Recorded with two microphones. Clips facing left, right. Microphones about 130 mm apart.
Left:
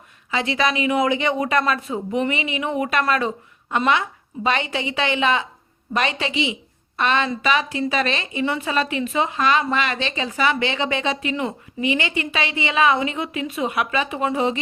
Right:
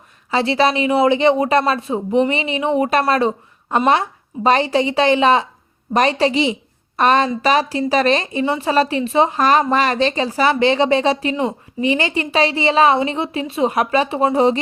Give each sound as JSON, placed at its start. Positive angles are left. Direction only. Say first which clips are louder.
{"t": 0.3, "sound": "a woman's voice", "louder": "right 6 dB", "side_deg": -35}